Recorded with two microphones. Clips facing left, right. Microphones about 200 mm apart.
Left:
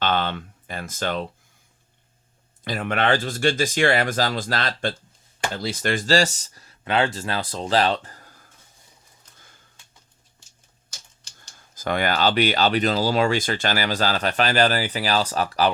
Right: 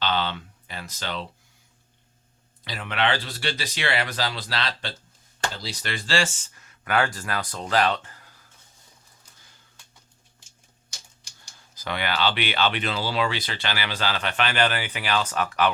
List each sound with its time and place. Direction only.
0.0 s a sound: 50° left (ahead or behind)
2.6 s speech: 50° left (ahead or behind)
11.7 s speech: 50° left (ahead or behind)